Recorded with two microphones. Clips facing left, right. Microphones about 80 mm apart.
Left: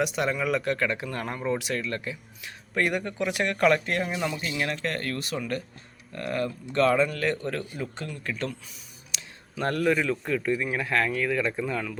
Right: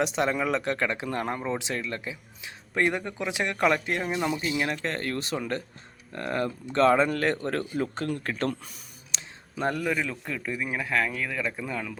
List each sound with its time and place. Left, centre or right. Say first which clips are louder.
0.0 s speech: right 1 dB; right
9.1 s a sound: even; right
9.6 s a man's voice: left 3 dB; centre
9.9 s speech: left 4 dB; centre